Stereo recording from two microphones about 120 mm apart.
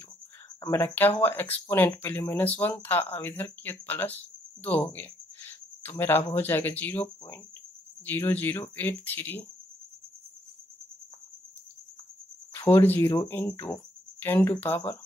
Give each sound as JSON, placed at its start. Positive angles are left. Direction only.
{"t": 0.6, "sound": "speech", "side_deg": 20}
{"t": 12.5, "sound": "cricket", "side_deg": 20}
{"t": 13.3, "sound": "speech", "side_deg": 15}